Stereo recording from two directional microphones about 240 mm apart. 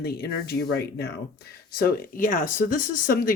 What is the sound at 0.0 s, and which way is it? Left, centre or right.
Speech, left.